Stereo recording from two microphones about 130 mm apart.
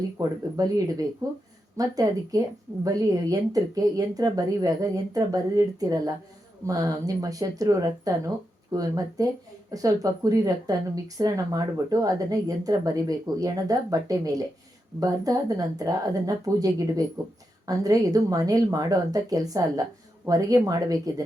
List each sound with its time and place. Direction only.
0.2 s a woman's voice: 25° right (ahead or behind)